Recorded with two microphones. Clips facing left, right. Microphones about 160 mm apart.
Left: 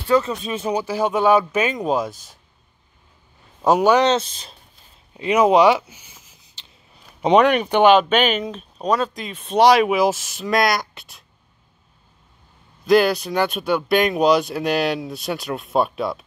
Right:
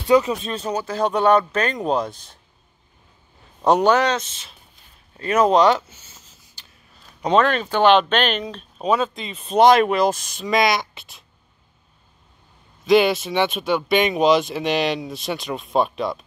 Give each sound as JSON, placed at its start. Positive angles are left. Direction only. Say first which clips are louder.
{"t": 0.1, "sound": "speech", "louder": "right 2 dB", "side_deg": -15}
{"t": 0.4, "sound": "speech", "louder": "left 2 dB", "side_deg": 10}
{"t": 3.6, "sound": "speech", "louder": "even", "side_deg": 0}
{"t": 3.9, "sound": "speech", "louder": "left 3 dB", "side_deg": 25}
{"t": 5.1, "sound": "a sound", "louder": "left 2 dB", "side_deg": 15}
{"t": 7.9, "sound": "speech", "louder": "left 2 dB", "side_deg": 10}
{"t": 12.8, "sound": "speech", "louder": "even", "side_deg": 0}